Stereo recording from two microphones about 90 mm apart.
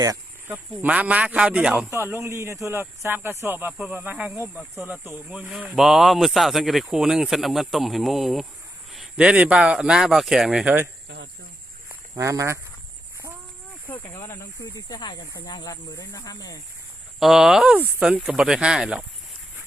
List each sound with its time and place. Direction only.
0.4 s speech: 20° right (ahead or behind)
1.9 s speech: 25° right (ahead or behind)
5.4 s speech: 10° right (ahead or behind)
9.1 s speech: 15° right (ahead or behind)
12.1 s speech: 35° right (ahead or behind)
14.1 s speech: 35° left (ahead or behind)
14.6 s speech: 50° left (ahead or behind)
17.2 s speech: 5° right (ahead or behind)